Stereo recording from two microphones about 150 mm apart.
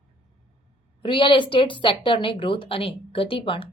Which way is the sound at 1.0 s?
35° left (ahead or behind).